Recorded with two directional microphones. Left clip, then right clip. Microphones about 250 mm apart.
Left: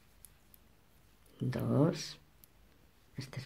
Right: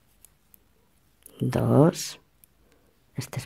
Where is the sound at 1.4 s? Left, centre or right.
Right.